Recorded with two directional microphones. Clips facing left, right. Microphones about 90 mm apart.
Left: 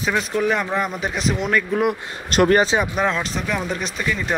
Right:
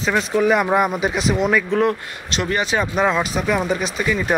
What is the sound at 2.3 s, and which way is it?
Speech, 45° left (ahead or behind).